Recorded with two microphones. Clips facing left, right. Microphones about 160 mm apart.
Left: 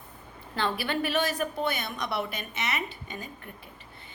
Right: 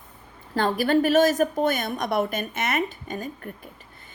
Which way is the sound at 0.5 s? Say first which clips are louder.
Right 8 dB; 45° right (ahead or behind).